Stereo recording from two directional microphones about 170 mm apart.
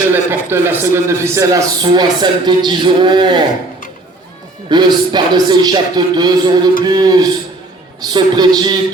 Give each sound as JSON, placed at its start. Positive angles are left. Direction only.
{"t": 0.1, "sound": "a man's voice", "side_deg": -15}
{"t": 4.7, "sound": "a man's voice", "side_deg": -25}